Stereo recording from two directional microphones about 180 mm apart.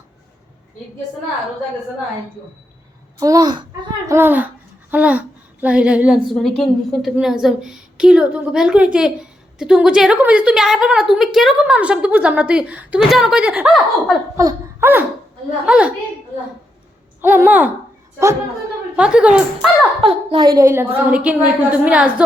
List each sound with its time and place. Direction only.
3.2 s a child's voice: 20° right (ahead or behind)
14.3 s a sound: 15° right (ahead or behind)
15.6 s a woman's voice: 5° right (ahead or behind)
17.2 s a woman's voice: 10° right (ahead or behind)
18.9 s a woman's voice: 5° right (ahead or behind)
20.0 s a woman's voice: 30° right (ahead or behind); by 22.1 s 5° right (ahead or behind)